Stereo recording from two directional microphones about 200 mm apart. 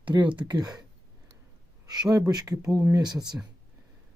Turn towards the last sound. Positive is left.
turn(degrees=-20)  # may be behind; listen again after turning